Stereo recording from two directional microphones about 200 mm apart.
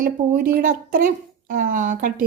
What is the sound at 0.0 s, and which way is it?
A woman's voice, 45° right (ahead or behind).